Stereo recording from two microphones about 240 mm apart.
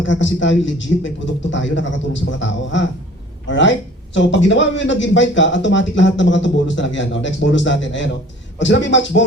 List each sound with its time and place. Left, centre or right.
0.1 s speech: left